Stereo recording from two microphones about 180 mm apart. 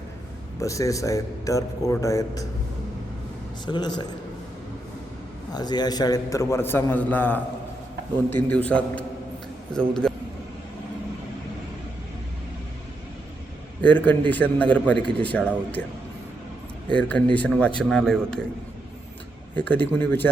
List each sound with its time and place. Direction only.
0.6 s a man's voice: 20° left (ahead or behind)
3.7 s speech: 25° left (ahead or behind)
5.5 s a man's voice: 20° left (ahead or behind); by 10.1 s 5° left (ahead or behind)
13.8 s a man's voice: 10° left (ahead or behind)
16.9 s a man's voice: 5° left (ahead or behind)
19.5 s a man's voice: 10° left (ahead or behind)